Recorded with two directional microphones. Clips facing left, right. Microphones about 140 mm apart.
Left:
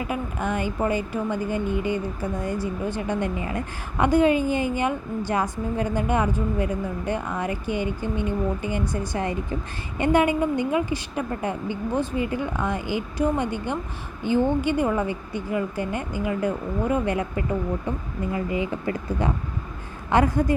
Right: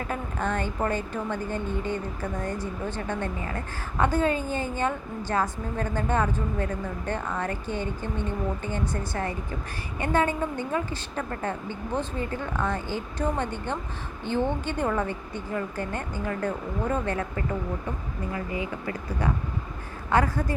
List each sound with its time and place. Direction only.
0.0 s speech: 10° left (ahead or behind)